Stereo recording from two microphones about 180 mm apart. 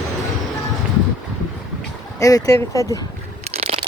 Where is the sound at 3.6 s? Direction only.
30° right (ahead or behind).